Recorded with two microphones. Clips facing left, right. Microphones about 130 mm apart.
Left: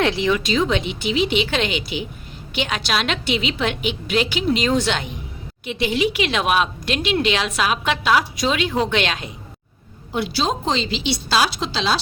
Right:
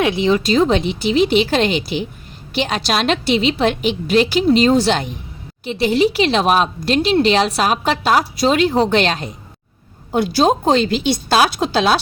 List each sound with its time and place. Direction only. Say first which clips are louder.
0.0 s speech: right 3 dB; 15° right (ahead or behind)
0.3 s a woman's voice: right 5 dB; 40° right (ahead or behind); by 11.9 s 55° right (ahead or behind)